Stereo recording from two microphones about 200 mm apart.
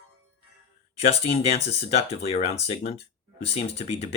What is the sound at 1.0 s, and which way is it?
Speech, 30° left (ahead or behind).